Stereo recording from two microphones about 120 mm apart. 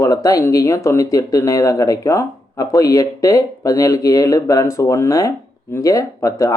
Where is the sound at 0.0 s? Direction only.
30° left (ahead or behind).